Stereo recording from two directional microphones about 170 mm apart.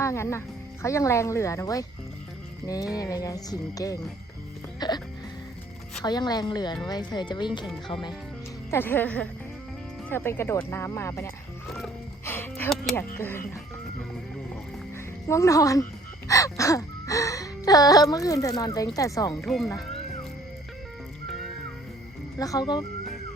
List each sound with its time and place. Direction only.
0.0 s speech: 15° left (ahead or behind)
2.6 s wail: 20° left (ahead or behind)
6.0 s wail: 25° left (ahead or behind)
8.7 s speech: 10° left (ahead or behind)
12.2 s music: 15° left (ahead or behind)
13.1 s speech: 15° left (ahead or behind)
15.3 s wail: 20° left (ahead or behind)
22.4 s wail: 20° left (ahead or behind)